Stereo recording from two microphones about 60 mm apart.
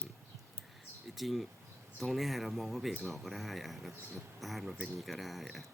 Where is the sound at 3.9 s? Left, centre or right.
Right.